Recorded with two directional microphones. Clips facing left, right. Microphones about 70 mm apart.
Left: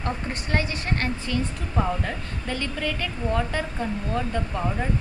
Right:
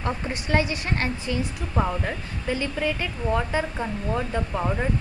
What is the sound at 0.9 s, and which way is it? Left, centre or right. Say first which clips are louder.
A woman's voice: left 1 dB; centre.